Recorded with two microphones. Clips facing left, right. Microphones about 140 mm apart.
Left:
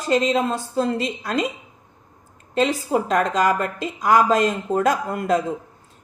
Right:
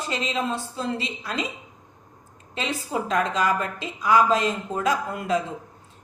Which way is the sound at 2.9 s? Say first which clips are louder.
Left 5 dB; 50° left (ahead or behind).